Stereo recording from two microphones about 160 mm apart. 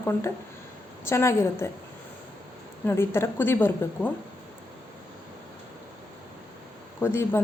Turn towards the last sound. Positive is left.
turn(degrees=15)  # may be behind; listen again after turning